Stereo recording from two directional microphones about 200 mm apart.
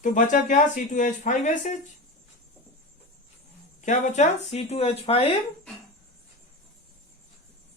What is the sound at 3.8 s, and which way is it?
Speech, 35° left (ahead or behind).